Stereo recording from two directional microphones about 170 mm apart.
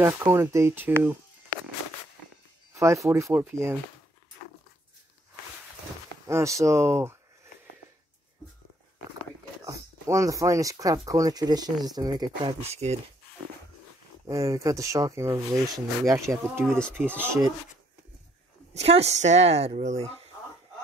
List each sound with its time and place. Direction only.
0.0 s speech: 15° right (ahead or behind)
2.7 s a sound: 15° right (ahead or behind)
3.1 s speech: 15° right (ahead or behind)
6.2 s speech: 15° right (ahead or behind)
9.7 s speech: 20° right (ahead or behind)
12.6 s speech: 40° right (ahead or behind)
14.2 s speech: 20° right (ahead or behind)
18.7 s speech: 40° right (ahead or behind)